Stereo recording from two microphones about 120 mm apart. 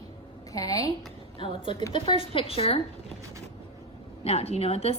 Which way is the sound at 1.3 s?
45° left (ahead or behind).